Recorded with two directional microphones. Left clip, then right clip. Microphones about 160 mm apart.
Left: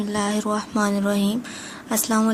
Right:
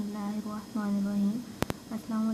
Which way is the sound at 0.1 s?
45° left (ahead or behind).